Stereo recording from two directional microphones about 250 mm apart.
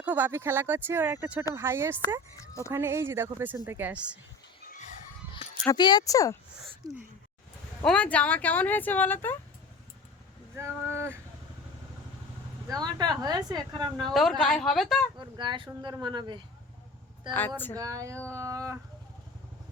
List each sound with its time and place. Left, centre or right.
0.0 s speech: centre
2.5 s speech: centre
2.7 s speech: centre
5.3 s speech: centre
6.8 s speech: centre
7.9 s speech: centre
10.5 s speech: centre
12.6 s speech: centre
14.0 s a woman's voice: centre
15.2 s speech: centre
17.7 s speech: centre